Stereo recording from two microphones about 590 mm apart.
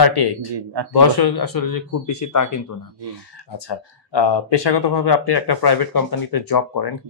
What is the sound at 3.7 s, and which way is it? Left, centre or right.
Speech, left.